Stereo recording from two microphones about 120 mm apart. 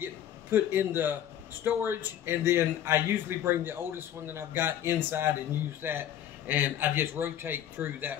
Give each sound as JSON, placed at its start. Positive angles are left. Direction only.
{"t": 0.0, "sound": "a man's voice", "side_deg": -20}